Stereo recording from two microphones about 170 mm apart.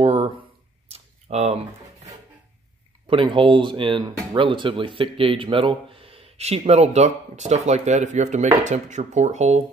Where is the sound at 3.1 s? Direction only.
30° right (ahead or behind).